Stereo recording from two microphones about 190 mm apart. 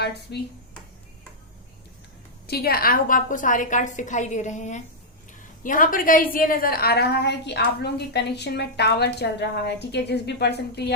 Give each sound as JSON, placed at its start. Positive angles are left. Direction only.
{"t": 0.3, "sound": "a woman's voice", "side_deg": 60}
{"t": 2.5, "sound": "a woman's voice", "side_deg": 55}